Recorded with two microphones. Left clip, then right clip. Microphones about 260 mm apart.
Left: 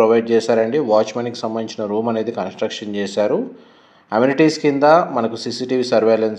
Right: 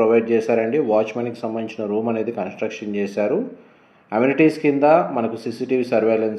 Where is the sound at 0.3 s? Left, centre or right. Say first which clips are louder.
Left 3 dB; left.